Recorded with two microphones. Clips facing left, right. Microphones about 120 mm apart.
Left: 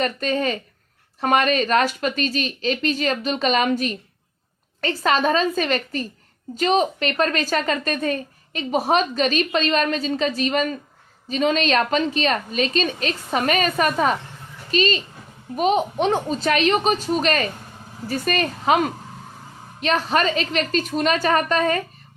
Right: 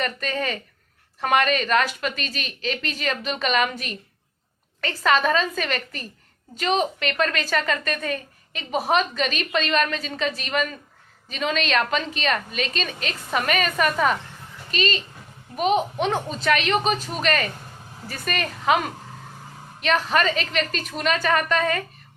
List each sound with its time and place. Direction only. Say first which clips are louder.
0.0 s a woman's voice: left 5 dB; 30° left (ahead or behind)